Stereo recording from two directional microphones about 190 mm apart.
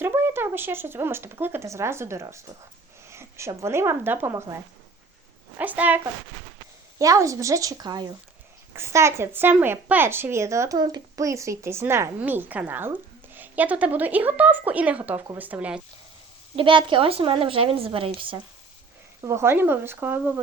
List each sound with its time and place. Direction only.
0.0 s speech: 15° right (ahead or behind)
16.6 s a woman's voice: 25° right (ahead or behind)
19.2 s speech: 15° right (ahead or behind)